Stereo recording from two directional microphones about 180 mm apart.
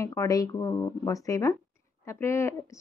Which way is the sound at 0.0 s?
15° left (ahead or behind).